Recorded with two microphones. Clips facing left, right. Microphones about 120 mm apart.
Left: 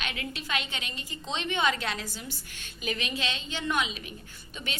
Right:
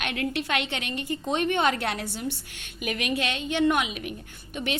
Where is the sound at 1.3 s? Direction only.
50° right (ahead or behind); by 2.3 s 65° right (ahead or behind).